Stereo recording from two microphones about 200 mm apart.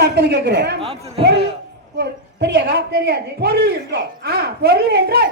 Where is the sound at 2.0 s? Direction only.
55° right (ahead or behind).